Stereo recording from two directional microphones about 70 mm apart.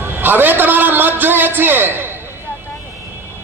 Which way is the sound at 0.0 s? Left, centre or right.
Right.